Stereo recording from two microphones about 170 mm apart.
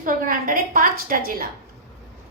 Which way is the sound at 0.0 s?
55° right (ahead or behind).